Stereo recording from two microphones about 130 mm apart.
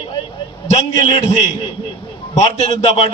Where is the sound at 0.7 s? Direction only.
60° left (ahead or behind).